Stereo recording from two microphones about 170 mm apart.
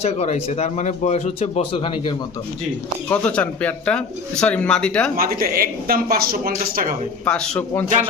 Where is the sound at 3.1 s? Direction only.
10° left (ahead or behind).